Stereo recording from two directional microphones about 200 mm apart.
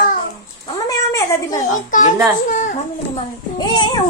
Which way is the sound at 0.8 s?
15° left (ahead or behind).